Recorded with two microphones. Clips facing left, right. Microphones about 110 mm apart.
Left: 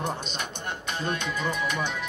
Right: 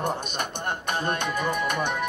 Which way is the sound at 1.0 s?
50° right (ahead or behind).